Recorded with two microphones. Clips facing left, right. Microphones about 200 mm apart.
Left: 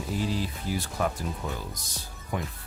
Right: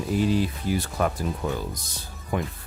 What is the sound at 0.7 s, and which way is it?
Speech, 60° right (ahead or behind).